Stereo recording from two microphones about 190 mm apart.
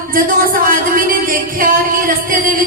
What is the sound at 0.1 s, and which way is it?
Speech, 45° right (ahead or behind).